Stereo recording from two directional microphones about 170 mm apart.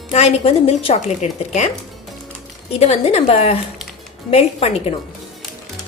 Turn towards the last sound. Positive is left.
turn(degrees=35)  # may be behind; listen again after turning